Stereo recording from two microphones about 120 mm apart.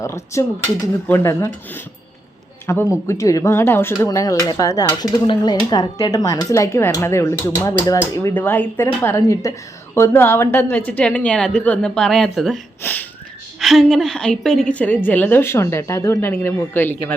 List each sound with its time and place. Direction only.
0.0 s speech: 25° left (ahead or behind)
8.3 s a woman's voice: 15° left (ahead or behind)
12.8 s a sound: 15° left (ahead or behind)
13.6 s a woman's voice: centre (ahead or behind)